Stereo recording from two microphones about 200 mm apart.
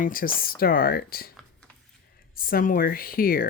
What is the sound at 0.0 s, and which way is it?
Speech, 45° left (ahead or behind).